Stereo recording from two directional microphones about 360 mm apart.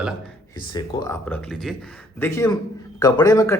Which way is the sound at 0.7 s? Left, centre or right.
Centre.